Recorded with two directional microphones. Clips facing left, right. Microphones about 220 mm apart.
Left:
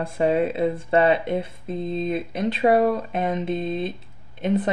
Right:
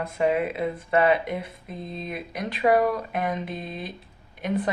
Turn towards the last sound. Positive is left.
turn(degrees=25)  # may be behind; listen again after turning